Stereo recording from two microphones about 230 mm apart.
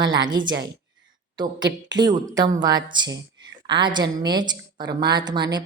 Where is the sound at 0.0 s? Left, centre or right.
Centre.